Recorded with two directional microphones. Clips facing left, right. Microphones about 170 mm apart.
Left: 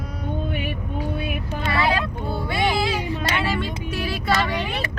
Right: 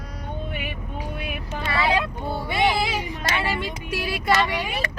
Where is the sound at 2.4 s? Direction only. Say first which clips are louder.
Even; 15° right (ahead or behind).